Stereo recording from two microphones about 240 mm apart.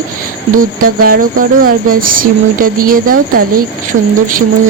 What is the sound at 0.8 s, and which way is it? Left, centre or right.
Speech, right.